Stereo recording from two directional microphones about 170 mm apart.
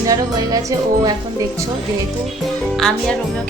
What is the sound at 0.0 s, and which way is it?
Music, 20° right (ahead or behind).